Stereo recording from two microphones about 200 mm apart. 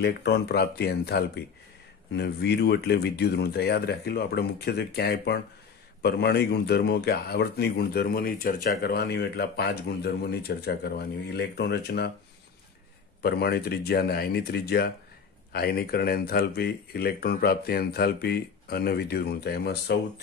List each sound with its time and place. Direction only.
0.0 s a man's voice: 55° left (ahead or behind)
13.2 s a man's voice: 50° left (ahead or behind)